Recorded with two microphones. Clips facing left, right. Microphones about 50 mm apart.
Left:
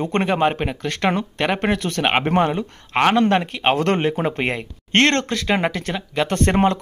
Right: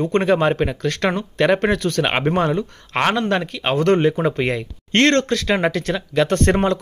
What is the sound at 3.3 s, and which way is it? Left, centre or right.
Speech, left.